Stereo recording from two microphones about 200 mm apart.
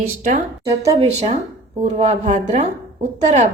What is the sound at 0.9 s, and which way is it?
Speech, 30° right (ahead or behind).